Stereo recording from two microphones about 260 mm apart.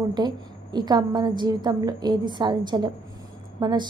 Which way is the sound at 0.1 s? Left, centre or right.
Centre.